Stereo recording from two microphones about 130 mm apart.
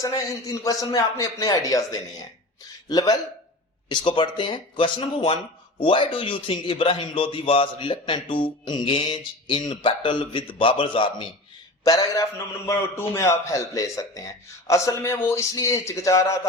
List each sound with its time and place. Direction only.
0.0 s a man's voice: 25° left (ahead or behind)
11.9 s a man's voice: 25° left (ahead or behind)